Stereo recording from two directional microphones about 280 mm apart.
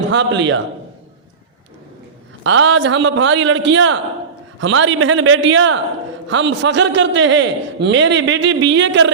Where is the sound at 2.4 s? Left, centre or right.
Right.